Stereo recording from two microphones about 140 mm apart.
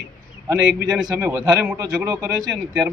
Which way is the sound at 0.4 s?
20° right (ahead or behind).